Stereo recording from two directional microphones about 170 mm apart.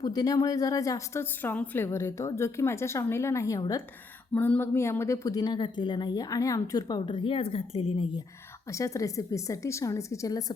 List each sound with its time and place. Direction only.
0.0 s a woman's voice: 20° left (ahead or behind)
8.7 s a woman's voice: 20° left (ahead or behind)